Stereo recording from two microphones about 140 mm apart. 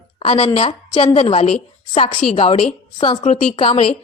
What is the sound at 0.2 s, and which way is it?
A woman's voice, 45° left (ahead or behind).